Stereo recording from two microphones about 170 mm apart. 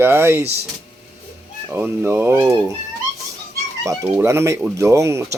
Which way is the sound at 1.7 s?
15° right (ahead or behind).